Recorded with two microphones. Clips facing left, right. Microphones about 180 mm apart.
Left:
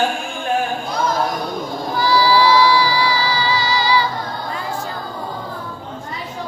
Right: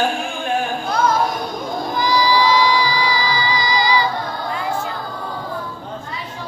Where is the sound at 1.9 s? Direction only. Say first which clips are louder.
Left 2 dB; 15° right (ahead or behind).